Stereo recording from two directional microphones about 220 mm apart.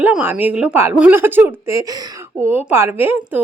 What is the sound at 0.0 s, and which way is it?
A woman's voice, 10° right (ahead or behind).